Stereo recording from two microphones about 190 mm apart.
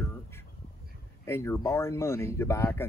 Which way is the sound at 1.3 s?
15° left (ahead or behind).